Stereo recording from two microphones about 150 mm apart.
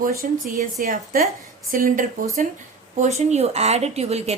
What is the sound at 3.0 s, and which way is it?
Speech, 45° right (ahead or behind).